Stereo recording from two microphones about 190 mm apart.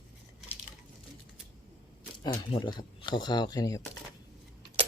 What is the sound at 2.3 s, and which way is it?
Speech, 25° left (ahead or behind).